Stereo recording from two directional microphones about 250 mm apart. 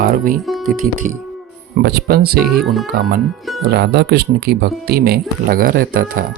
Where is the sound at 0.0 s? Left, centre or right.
Right.